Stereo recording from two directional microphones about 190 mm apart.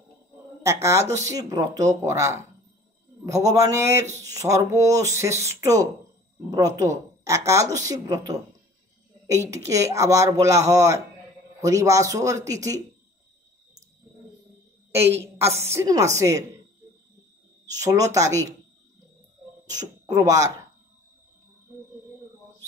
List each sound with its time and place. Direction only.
0.6 s speech: 15° right (ahead or behind)
9.5 s speech: 15° right (ahead or behind)
14.9 s a woman's voice: 15° right (ahead or behind)
17.7 s speech: 15° right (ahead or behind)
19.7 s speech: 20° right (ahead or behind)